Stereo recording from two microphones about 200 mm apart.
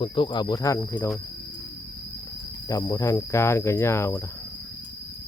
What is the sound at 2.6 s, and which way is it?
Cricket, 15° left (ahead or behind).